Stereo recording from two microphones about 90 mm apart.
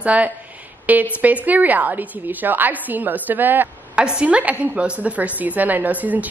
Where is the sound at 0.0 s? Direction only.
15° right (ahead or behind).